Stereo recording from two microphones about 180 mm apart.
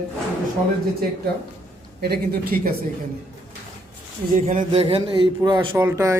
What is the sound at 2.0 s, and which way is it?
Speech, 60° right (ahead or behind).